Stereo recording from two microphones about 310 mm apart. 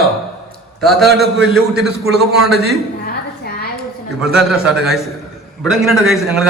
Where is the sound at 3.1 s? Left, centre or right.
Left.